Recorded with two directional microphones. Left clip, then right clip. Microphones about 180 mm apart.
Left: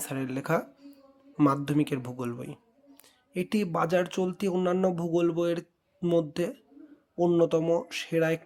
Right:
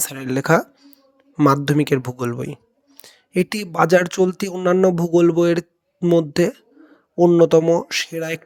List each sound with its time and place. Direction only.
0.0 s speech: 40° right (ahead or behind)